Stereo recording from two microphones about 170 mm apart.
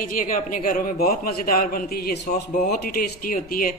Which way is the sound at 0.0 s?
55° left (ahead or behind).